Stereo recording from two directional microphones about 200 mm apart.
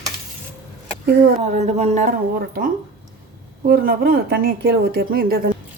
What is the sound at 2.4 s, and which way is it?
A woman's voice, 50° right (ahead or behind).